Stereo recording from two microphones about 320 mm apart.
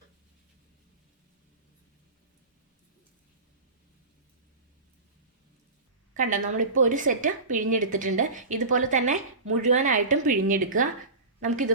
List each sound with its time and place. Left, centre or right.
6.1 s a woman's voice: right